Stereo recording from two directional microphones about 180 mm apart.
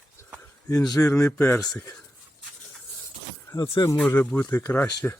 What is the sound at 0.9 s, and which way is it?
Speech, 15° left (ahead or behind).